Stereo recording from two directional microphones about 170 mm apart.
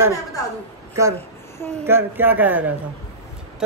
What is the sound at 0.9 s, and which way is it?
A child's voice, 15° right (ahead or behind).